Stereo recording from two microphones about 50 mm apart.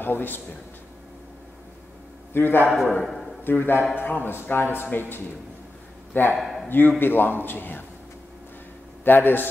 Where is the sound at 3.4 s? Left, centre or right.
Left.